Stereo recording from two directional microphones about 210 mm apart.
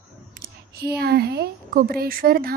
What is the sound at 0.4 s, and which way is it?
A woman's voice, 50° right (ahead or behind).